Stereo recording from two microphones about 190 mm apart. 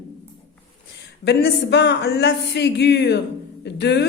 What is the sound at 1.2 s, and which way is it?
Speech, 60° left (ahead or behind).